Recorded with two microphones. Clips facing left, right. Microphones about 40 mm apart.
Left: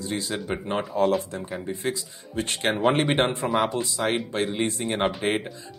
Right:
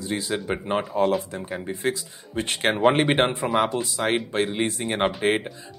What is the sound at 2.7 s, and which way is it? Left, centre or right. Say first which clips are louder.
Speech: right 2 dB; centre.